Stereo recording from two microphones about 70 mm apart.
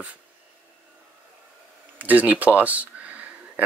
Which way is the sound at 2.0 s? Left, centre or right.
Right.